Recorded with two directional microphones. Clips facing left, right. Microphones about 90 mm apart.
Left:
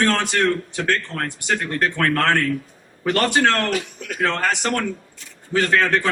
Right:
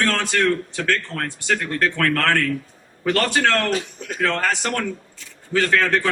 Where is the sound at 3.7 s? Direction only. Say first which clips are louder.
Even; 30° right (ahead or behind).